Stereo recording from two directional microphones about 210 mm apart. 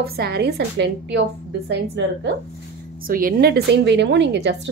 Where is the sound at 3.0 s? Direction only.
40° right (ahead or behind).